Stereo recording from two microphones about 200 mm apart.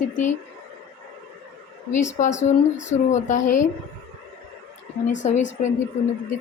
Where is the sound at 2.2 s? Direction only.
35° left (ahead or behind).